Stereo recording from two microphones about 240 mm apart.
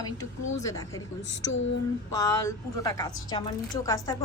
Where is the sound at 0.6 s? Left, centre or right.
Centre.